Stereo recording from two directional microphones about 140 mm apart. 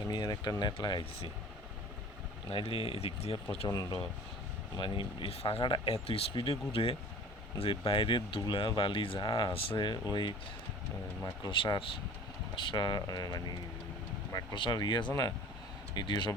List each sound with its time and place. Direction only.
0.1 s speech: 30° left (ahead or behind)
2.5 s speech: 40° left (ahead or behind)
3.7 s speech: 25° left (ahead or behind)
11.4 s speech: 35° left (ahead or behind)